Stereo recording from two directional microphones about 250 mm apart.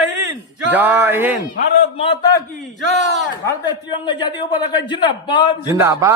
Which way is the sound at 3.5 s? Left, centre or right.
Centre.